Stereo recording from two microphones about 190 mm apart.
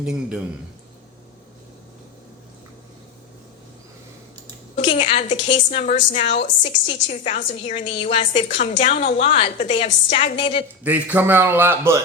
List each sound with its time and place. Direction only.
0.0 s a man's voice: 5° right (ahead or behind)
4.8 s a woman's voice: 30° left (ahead or behind)
10.8 s a man's voice: 10° right (ahead or behind)